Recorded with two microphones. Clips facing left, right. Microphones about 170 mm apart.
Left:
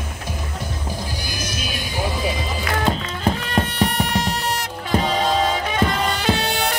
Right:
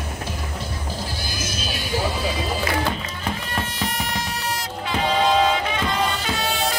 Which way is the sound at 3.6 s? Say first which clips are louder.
Left 6 dB; 60° left (ahead or behind).